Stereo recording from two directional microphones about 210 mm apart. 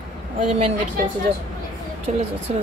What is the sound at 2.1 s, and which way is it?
Speech, 35° right (ahead or behind).